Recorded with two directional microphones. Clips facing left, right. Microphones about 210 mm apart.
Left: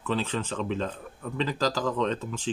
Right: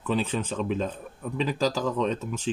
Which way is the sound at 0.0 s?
10° right (ahead or behind).